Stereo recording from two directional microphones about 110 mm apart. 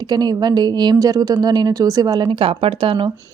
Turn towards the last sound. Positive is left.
turn(degrees=-50)  # may be behind; listen again after turning